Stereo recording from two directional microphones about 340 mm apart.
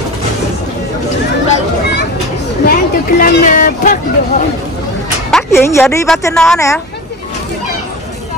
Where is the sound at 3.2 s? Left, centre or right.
Left.